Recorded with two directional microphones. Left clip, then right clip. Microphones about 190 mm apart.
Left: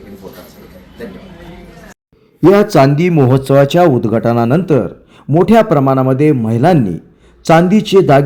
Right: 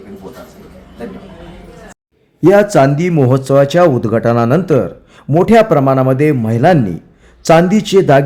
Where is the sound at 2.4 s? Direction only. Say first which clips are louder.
Even; centre (ahead or behind).